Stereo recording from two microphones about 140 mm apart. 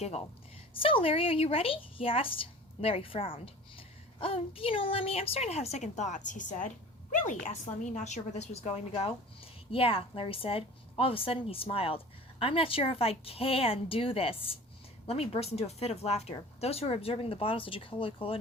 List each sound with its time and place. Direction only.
0.0 s a woman's voice: 50° left (ahead or behind)
0.7 s a woman's voice: 40° left (ahead or behind)